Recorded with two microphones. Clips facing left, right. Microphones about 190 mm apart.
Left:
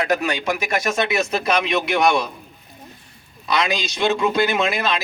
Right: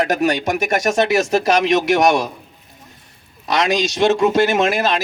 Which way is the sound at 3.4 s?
45° right (ahead or behind).